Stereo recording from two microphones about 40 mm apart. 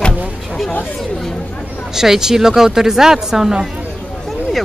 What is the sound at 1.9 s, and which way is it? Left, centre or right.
Speech, centre.